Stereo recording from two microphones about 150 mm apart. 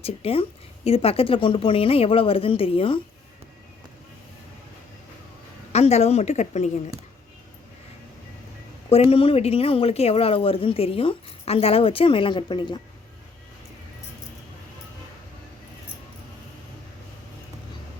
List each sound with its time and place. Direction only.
0.0 s speech: 40° left (ahead or behind)
5.7 s a woman's voice: 45° left (ahead or behind)
8.9 s speech: 40° left (ahead or behind)